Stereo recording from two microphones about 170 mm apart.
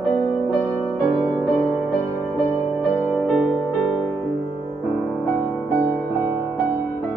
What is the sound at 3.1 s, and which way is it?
Music, centre (ahead or behind).